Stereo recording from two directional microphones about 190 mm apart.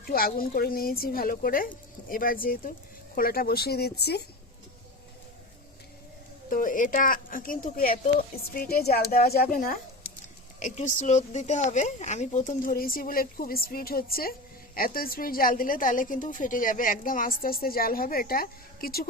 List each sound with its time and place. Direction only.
0.0 s a woman's voice: 50° left (ahead or behind)
6.5 s a woman's voice: 45° left (ahead or behind)